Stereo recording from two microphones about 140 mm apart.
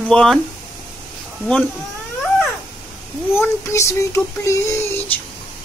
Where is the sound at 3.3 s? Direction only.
20° left (ahead or behind).